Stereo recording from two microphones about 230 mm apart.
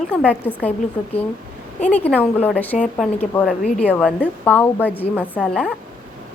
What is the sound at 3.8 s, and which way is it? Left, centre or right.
A woman's voice, centre.